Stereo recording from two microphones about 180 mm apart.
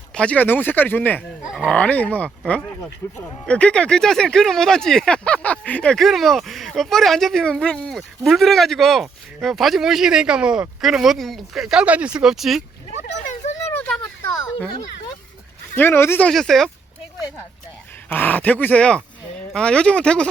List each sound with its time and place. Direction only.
0.1 s speech: 5° left (ahead or behind)
1.5 s speech: centre (ahead or behind)
13.3 s a sound: 40° left (ahead or behind)
13.7 s a sound: 5° left (ahead or behind)
15.7 s speech: 10° left (ahead or behind)
18.1 s speech: 10° left (ahead or behind)